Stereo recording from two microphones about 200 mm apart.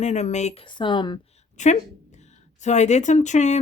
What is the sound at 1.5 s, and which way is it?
Speech, 35° left (ahead or behind).